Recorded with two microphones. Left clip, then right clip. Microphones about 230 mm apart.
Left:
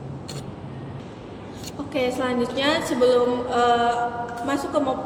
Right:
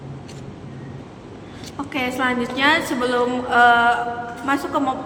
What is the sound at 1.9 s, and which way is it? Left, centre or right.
A woman's voice, centre.